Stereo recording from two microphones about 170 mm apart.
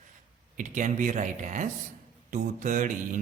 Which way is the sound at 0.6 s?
50° right (ahead or behind).